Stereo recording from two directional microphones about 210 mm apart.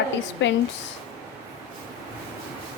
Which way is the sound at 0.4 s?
60° left (ahead or behind).